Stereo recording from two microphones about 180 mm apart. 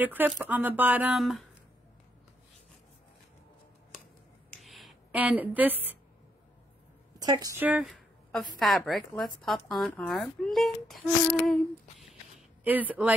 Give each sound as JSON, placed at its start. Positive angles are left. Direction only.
{"t": 0.0, "sound": "speech", "side_deg": -10}
{"t": 4.5, "sound": "a sound", "side_deg": 0}
{"t": 7.2, "sound": "a woman's voice", "side_deg": -20}
{"t": 7.6, "sound": "a woman's voice", "side_deg": -5}
{"t": 12.6, "sound": "speech", "side_deg": -10}